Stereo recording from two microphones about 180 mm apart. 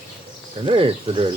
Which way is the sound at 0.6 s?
30° right (ahead or behind).